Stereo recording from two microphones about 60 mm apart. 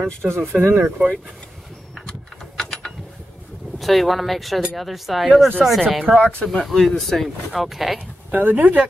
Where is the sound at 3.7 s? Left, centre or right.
Centre.